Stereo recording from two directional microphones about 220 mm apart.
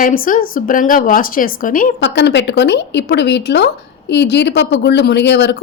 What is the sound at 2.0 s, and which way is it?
Speech, 50° left (ahead or behind).